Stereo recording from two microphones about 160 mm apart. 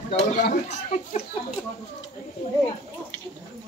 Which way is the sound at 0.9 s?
45° left (ahead or behind).